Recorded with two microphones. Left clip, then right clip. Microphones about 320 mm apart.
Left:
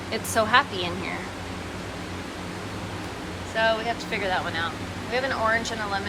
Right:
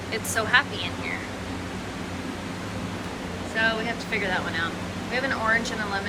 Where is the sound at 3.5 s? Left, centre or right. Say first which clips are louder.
Left 2 dB; centre.